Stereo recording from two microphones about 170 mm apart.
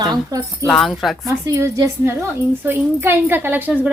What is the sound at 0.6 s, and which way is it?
Speech, 5° left (ahead or behind).